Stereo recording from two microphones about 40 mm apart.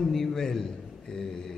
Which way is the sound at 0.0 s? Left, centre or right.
Centre.